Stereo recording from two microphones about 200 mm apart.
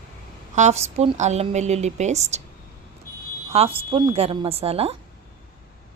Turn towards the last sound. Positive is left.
turn(degrees=-30)  # may be behind; listen again after turning